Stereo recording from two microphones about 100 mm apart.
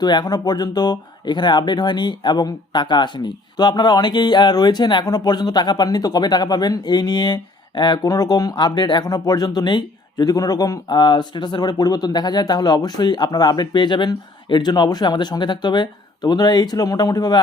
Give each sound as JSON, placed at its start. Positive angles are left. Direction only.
{"t": 0.0, "sound": "speech", "side_deg": 45}